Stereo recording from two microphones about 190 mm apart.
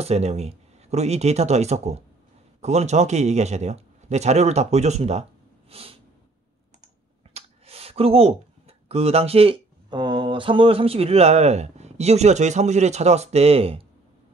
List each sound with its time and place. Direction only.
0.0 s a man's voice: 35° right (ahead or behind)
5.7 s snort: 30° right (ahead or behind)
7.3 s speech: 30° right (ahead or behind)